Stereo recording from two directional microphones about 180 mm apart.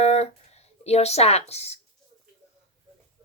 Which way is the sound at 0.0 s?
35° left (ahead or behind).